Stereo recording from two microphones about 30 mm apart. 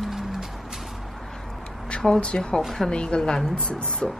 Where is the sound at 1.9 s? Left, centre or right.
Left.